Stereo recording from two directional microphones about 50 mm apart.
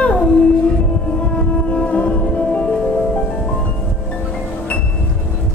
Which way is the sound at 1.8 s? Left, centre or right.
Left.